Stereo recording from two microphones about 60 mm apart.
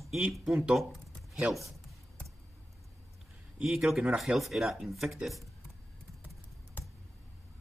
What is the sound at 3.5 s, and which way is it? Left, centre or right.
Speech, centre.